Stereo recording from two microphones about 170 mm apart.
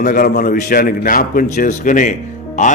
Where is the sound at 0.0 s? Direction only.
55° left (ahead or behind).